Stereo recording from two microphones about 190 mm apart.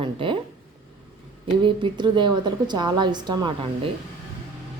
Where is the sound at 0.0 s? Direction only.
25° right (ahead or behind).